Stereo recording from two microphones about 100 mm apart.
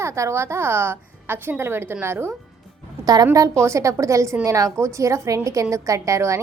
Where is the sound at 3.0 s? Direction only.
35° right (ahead or behind).